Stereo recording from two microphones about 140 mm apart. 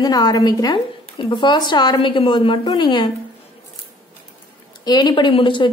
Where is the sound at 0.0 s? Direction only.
30° left (ahead or behind).